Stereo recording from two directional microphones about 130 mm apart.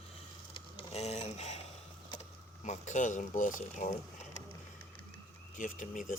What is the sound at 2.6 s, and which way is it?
Speech, 65° left (ahead or behind).